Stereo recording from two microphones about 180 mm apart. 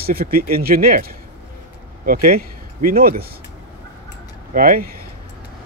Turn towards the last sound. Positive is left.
turn(degrees=-50)  # may be behind; listen again after turning